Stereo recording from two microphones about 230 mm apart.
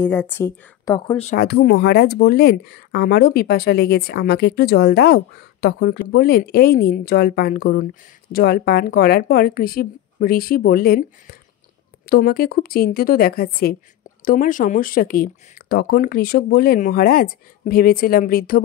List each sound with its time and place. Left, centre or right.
0.0 s a woman's voice: centre
1.3 s a woman's voice: left